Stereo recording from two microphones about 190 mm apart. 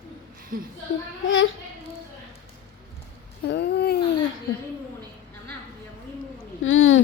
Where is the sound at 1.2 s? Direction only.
90° left.